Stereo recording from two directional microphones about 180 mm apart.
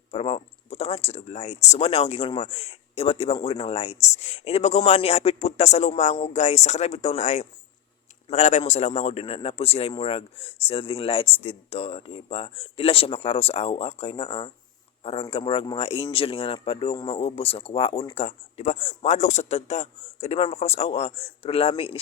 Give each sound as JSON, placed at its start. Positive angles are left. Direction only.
{"t": 0.1, "sound": "speech", "side_deg": 30}